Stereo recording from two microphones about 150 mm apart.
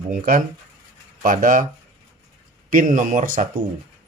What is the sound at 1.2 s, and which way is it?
Speech, 65° right (ahead or behind).